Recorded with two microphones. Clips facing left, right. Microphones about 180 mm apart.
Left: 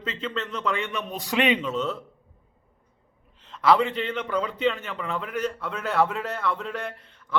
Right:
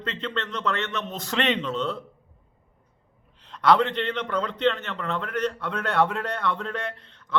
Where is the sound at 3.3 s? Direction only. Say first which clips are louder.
Even; centre (ahead or behind).